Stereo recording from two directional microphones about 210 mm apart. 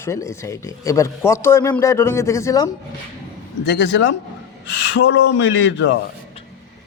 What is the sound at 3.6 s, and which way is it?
Speech, 60° left (ahead or behind).